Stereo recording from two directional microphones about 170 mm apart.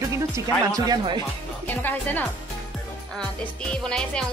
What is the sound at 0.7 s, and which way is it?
Speech, 20° right (ahead or behind).